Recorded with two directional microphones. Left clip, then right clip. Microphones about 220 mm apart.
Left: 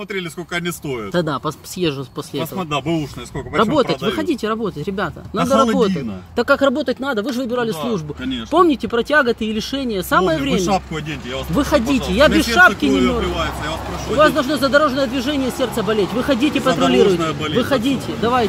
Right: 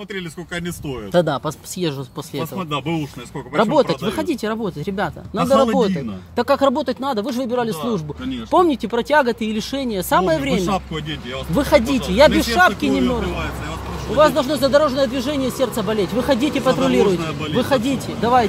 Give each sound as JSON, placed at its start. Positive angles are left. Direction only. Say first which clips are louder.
{"t": 0.1, "sound": "speech", "louder": "left 4 dB", "side_deg": -5}
{"t": 1.8, "sound": "speech", "louder": "left 4 dB", "side_deg": -5}
{"t": 3.5, "sound": "speech", "louder": "even", "side_deg": -10}
{"t": 14.1, "sound": "speech", "louder": "left 1 dB", "side_deg": -10}